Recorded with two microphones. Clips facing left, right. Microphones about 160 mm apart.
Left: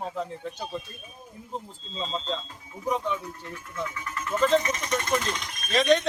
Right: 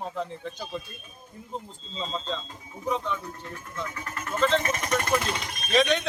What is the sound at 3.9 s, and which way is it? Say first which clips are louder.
Speech: left 2 dB; 45° right (ahead or behind).